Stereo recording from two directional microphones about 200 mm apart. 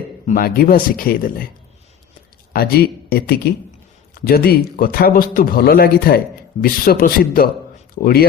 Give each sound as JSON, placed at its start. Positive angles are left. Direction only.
{"t": 0.3, "sound": "speech", "side_deg": 45}
{"t": 2.5, "sound": "speech", "side_deg": 50}